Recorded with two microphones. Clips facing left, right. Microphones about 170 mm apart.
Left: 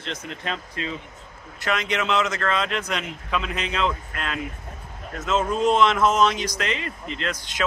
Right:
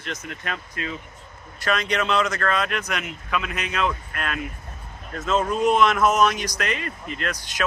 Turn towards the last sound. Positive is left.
turn(degrees=25)  # may be behind; listen again after turning